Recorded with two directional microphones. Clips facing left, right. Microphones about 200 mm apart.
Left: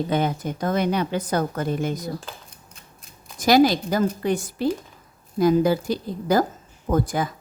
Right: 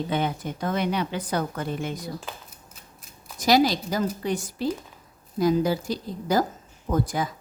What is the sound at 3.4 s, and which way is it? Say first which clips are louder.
A woman's voice: left 4 dB; 50° left (ahead or behind).